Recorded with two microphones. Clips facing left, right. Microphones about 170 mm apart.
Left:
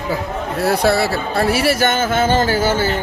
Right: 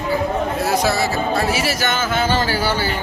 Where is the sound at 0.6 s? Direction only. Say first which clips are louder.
Left 6 dB; 60° left (ahead or behind).